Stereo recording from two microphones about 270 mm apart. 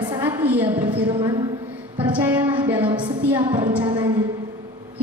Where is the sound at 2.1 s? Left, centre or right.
Centre.